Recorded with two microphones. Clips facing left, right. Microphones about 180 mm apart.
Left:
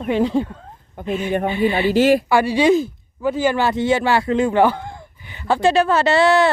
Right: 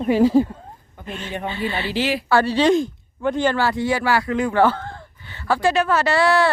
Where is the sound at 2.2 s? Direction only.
15° left (ahead or behind).